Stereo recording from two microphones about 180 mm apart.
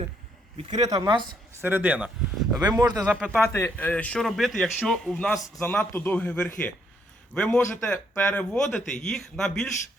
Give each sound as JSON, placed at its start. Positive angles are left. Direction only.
{"t": 0.5, "sound": "speech", "side_deg": -25}
{"t": 1.6, "sound": "speech", "side_deg": -10}
{"t": 2.6, "sound": "speech", "side_deg": -20}
{"t": 3.0, "sound": "speech", "side_deg": -10}
{"t": 3.5, "sound": "a man's voice", "side_deg": 10}